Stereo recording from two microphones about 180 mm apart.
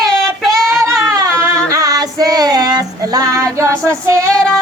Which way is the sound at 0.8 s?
20° right (ahead or behind).